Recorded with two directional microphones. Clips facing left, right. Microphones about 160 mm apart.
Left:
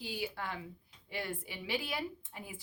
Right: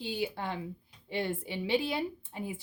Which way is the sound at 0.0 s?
25° right (ahead or behind).